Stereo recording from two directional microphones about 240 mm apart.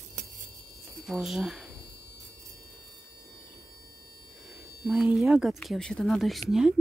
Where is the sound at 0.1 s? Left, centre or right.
Right.